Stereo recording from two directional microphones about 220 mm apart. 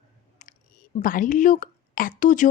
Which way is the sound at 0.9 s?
40° left (ahead or behind).